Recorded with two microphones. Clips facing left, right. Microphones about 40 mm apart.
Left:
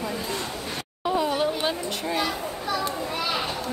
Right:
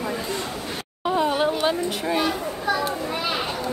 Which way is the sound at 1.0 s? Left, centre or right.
Centre.